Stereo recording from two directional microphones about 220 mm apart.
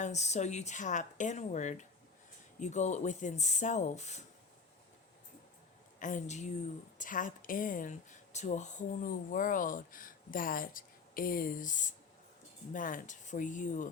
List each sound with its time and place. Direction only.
0.0 s speech: 30° left (ahead or behind)
6.0 s speech: 35° left (ahead or behind)